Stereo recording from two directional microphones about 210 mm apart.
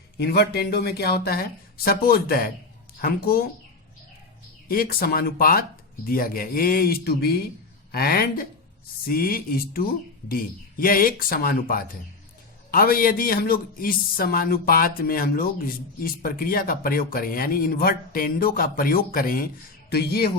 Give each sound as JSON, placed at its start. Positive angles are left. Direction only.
{"t": 0.2, "sound": "a man's voice", "side_deg": 50}
{"t": 4.7, "sound": "a man's voice", "side_deg": 45}